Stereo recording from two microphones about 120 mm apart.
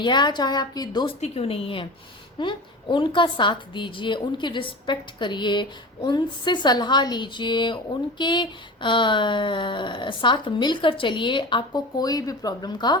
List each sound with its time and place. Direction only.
0.0 s a woman's voice: 40° left (ahead or behind)
1.0 s a woman's voice: 55° left (ahead or behind); by 13.0 s 35° left (ahead or behind)